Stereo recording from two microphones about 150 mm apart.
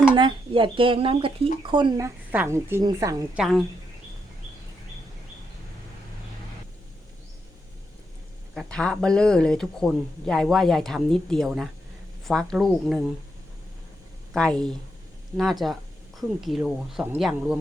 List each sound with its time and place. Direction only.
0.2 s a woman's voice: 35° right (ahead or behind)
3.3 s speech: centre (ahead or behind)
8.5 s speech: 5° left (ahead or behind)
14.3 s speech: 5° left (ahead or behind)